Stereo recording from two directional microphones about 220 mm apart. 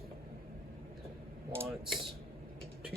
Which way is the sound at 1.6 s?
Centre (ahead or behind).